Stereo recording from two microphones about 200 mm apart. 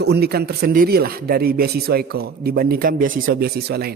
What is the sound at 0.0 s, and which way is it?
Speech, 55° right (ahead or behind).